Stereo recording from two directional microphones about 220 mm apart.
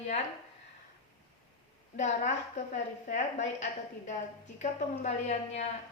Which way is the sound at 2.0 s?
30° left (ahead or behind).